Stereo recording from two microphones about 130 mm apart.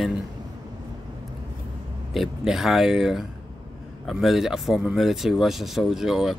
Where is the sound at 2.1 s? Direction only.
Centre (ahead or behind).